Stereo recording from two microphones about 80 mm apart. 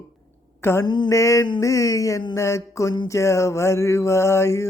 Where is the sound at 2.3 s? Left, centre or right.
Left.